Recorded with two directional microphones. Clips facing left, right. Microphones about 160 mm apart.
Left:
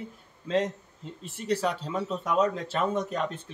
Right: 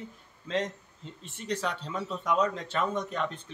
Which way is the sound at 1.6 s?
5° left (ahead or behind).